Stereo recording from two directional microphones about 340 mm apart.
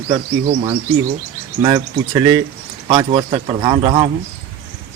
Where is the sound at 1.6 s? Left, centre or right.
Centre.